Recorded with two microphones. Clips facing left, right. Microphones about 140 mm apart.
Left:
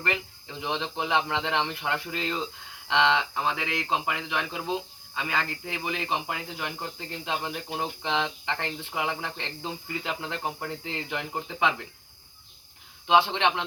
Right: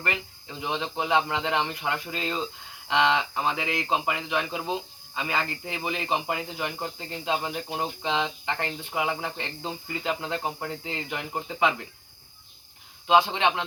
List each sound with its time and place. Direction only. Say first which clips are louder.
0.0 s speech: left 1 dB; 10° right (ahead or behind)
13.1 s speech: right 1 dB; 10° right (ahead or behind)